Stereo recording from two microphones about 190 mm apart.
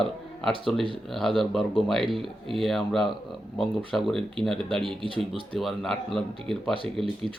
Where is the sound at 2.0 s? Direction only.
25° right (ahead or behind).